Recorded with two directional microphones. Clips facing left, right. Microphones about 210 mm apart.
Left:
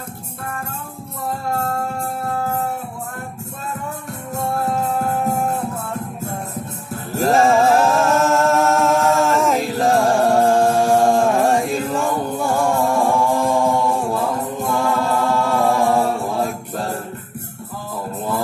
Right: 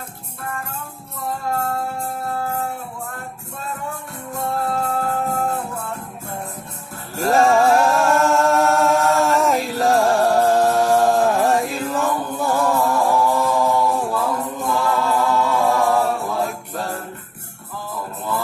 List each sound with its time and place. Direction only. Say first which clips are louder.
4.8 s music: left 2 dB; 20° left (ahead or behind)
7.2 s music: left 1 dB; centre (ahead or behind)
12.4 s chant: even; centre (ahead or behind)